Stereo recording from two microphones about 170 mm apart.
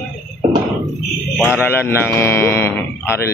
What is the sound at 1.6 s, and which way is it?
Speech, 15° left (ahead or behind).